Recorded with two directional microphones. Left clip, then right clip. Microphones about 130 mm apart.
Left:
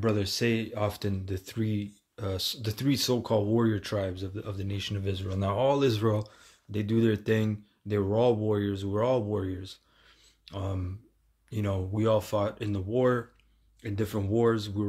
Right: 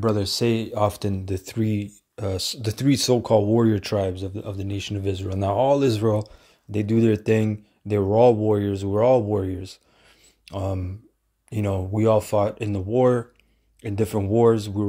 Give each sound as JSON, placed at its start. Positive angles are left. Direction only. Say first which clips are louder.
{"t": 0.0, "sound": "speech", "louder": "right 6 dB", "side_deg": -35}